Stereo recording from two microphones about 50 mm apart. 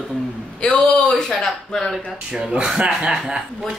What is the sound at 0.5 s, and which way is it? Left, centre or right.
Speech, centre.